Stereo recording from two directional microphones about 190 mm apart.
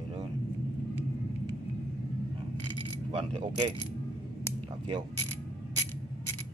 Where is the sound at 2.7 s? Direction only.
25° right (ahead or behind).